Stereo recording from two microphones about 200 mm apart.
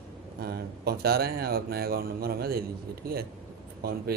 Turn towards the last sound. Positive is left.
turn(degrees=-50)  # may be behind; listen again after turning